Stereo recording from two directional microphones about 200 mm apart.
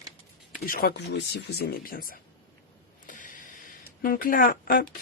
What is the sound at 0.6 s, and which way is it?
Speech, 50° left (ahead or behind).